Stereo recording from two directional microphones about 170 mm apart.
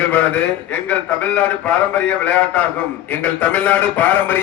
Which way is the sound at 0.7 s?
10° left (ahead or behind).